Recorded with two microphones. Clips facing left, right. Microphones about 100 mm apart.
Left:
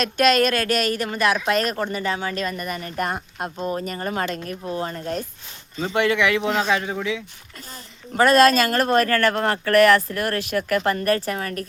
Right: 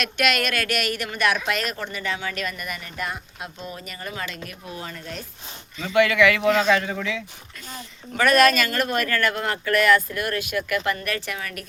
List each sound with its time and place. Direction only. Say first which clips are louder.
0.0 s a woman's voice: left 6 dB; 35° left (ahead or behind); by 7.2 s 20° left (ahead or behind)
8.1 s a woman's voice: left 3 dB; 30° left (ahead or behind)